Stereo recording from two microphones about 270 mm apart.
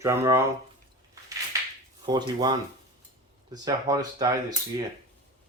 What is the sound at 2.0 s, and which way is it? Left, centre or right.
Speech, centre.